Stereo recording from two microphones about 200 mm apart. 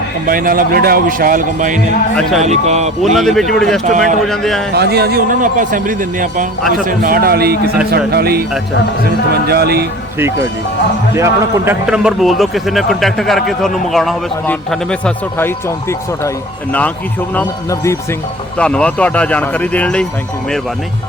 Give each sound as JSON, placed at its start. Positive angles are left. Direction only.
{"t": 0.3, "sound": "a man's voice", "side_deg": -45}
{"t": 3.2, "sound": "a man's voice", "side_deg": 0}
{"t": 3.8, "sound": "speech", "side_deg": -40}
{"t": 4.3, "sound": "a man's voice", "side_deg": 0}
{"t": 4.7, "sound": "a man's voice", "side_deg": -55}
{"t": 6.6, "sound": "a man's voice", "side_deg": 0}
{"t": 6.8, "sound": "a man's voice", "side_deg": -45}
{"t": 11.1, "sound": "a man's voice", "side_deg": -15}
{"t": 17.3, "sound": "speech", "side_deg": 15}